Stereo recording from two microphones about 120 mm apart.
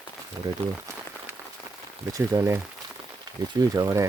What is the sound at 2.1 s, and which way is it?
Speech, 30° right (ahead or behind).